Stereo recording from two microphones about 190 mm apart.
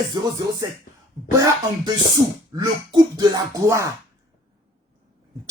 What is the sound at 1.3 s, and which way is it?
Speech, 20° right (ahead or behind).